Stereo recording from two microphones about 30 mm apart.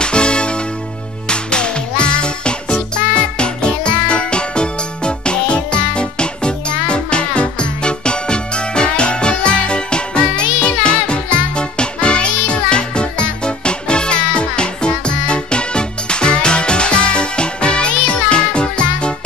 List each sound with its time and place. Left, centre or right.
0.0 s music: left